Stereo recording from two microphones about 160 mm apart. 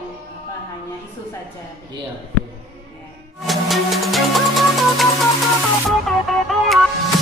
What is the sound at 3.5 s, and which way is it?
Music, centre (ahead or behind).